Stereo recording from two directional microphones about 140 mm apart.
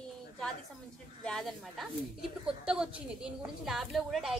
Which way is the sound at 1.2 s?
5° left (ahead or behind).